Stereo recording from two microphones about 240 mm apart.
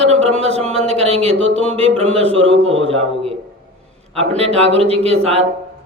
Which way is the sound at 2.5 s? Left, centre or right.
Right.